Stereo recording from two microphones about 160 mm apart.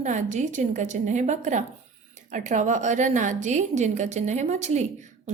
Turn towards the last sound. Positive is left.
turn(degrees=-45)  # may be behind; listen again after turning